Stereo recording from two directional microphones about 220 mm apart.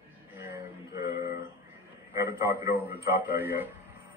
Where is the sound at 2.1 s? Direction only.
15° right (ahead or behind).